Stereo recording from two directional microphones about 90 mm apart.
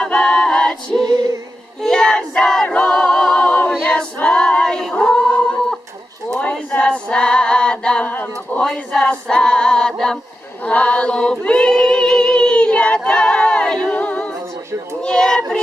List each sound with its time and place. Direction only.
0.0 s a capella: 10° left (ahead or behind)
1.0 s female singing: 45° right (ahead or behind)
1.8 s a capella: 10° left (ahead or behind)
6.2 s a sound: 15° left (ahead or behind)
6.5 s female singing: 10° left (ahead or behind)
10.6 s choir: 15° left (ahead or behind)
13.8 s a capella: 15° left (ahead or behind)
15.0 s a child's voice: 10° left (ahead or behind)